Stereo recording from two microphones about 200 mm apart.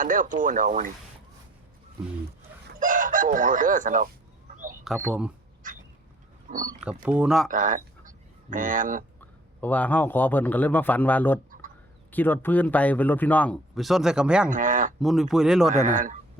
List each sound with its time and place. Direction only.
0.0 s speech: 40° right (ahead or behind)
2.7 s speech: 40° right (ahead or behind)
5.0 s speech: 5° right (ahead or behind)
6.5 s speech: 40° right (ahead or behind)
6.7 s speech: 5° right (ahead or behind)
7.5 s speech: 40° right (ahead or behind)
9.6 s speech: 10° left (ahead or behind)
14.5 s speech: 40° right (ahead or behind)
15.0 s speech: centre (ahead or behind)
15.7 s speech: 40° right (ahead or behind)